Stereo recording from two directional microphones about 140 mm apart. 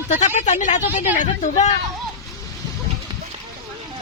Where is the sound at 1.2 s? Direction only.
60° left (ahead or behind).